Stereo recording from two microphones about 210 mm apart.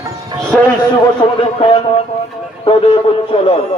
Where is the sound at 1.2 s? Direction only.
20° left (ahead or behind).